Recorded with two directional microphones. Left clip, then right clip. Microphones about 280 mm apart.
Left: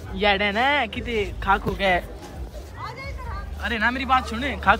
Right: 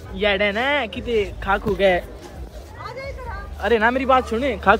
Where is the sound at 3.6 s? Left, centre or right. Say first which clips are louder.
Right 6 dB; centre.